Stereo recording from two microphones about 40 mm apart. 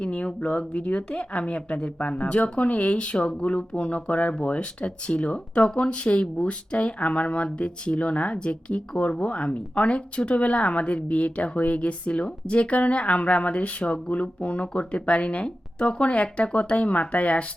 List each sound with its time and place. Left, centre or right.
0.0 s speech: left